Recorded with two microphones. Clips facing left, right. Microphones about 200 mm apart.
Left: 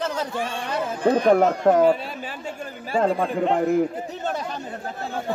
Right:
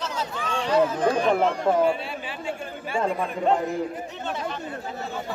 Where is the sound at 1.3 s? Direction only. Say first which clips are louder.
Left 5 dB; 45° left (ahead or behind).